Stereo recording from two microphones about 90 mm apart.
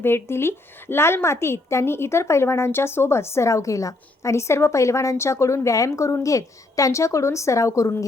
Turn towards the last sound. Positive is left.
turn(degrees=35)  # may be behind; listen again after turning